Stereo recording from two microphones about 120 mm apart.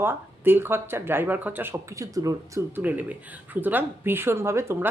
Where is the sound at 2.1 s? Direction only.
30° right (ahead or behind).